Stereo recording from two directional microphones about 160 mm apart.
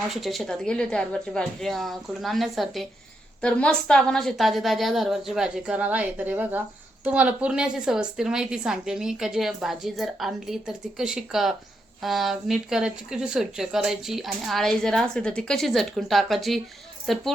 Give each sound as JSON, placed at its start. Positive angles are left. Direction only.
{"t": 0.1, "sound": "a woman's voice", "side_deg": 0}